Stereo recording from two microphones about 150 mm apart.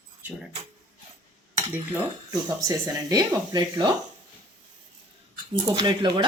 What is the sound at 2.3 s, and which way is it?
Speech, 25° right (ahead or behind).